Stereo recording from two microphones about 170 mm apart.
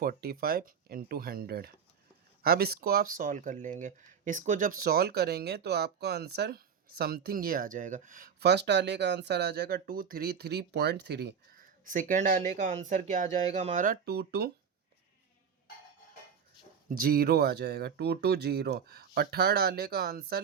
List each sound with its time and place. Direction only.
0.0 s speech: 60° right (ahead or behind)
8.4 s speech: 80° right
11.9 s speech: 50° right (ahead or behind); by 14.5 s 70° right (ahead or behind)
17.0 s speech: 65° right (ahead or behind)